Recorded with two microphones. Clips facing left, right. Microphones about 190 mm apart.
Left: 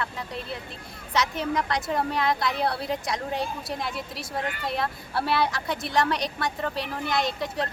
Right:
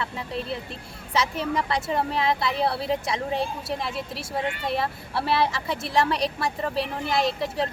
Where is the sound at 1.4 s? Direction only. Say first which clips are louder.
Right 1 dB; 5° right (ahead or behind).